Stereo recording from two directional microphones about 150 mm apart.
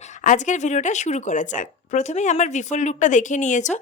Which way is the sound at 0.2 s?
55° left (ahead or behind).